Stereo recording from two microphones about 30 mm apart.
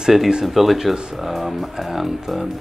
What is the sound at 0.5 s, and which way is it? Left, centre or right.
Speech, centre.